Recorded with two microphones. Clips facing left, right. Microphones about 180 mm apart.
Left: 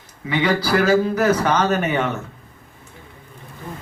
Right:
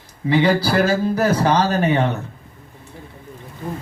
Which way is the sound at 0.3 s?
30° right (ahead or behind).